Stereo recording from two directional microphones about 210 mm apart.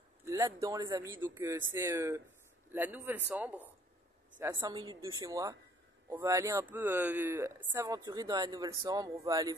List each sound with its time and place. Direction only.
0.2 s speech: 15° right (ahead or behind)